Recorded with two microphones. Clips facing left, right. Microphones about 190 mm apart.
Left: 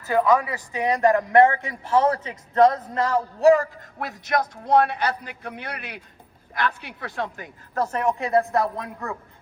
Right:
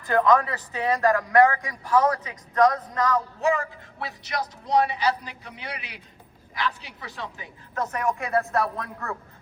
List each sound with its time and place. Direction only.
0.1 s a man's voice: 10° left (ahead or behind); by 4.0 s 35° left (ahead or behind)
4.0 s a man's voice: 50° left (ahead or behind)
7.8 s a woman's voice: 30° left (ahead or behind)